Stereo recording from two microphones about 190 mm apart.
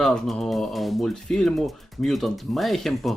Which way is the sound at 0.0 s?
5° left (ahead or behind).